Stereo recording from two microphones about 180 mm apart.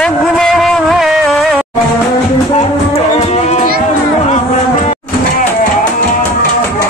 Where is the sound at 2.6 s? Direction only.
35° left (ahead or behind).